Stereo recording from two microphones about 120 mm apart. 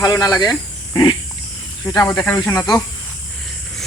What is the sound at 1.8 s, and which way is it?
Speech, 25° left (ahead or behind).